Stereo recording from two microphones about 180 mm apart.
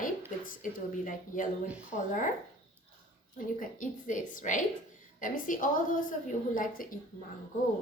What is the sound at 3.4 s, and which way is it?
Speech, 50° left (ahead or behind).